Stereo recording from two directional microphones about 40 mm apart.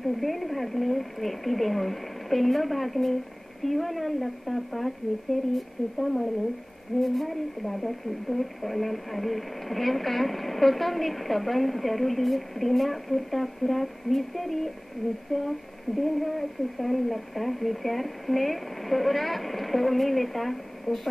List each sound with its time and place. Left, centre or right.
0.0 s speech: centre